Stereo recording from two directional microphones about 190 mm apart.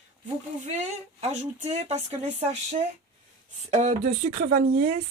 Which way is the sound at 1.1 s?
35° right (ahead or behind).